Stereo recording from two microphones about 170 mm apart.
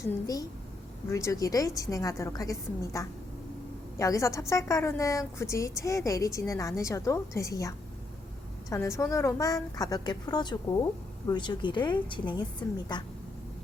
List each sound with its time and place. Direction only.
0.0 s a woman's voice: 20° left (ahead or behind)